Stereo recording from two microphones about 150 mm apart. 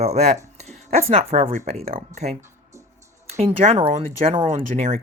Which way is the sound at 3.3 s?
45° right (ahead or behind).